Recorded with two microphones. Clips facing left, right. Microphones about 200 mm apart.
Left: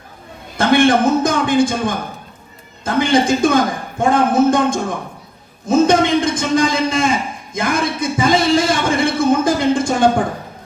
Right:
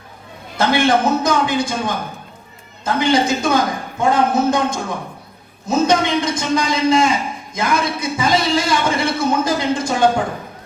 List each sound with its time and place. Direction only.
0.5 s a man's voice: 50° left (ahead or behind)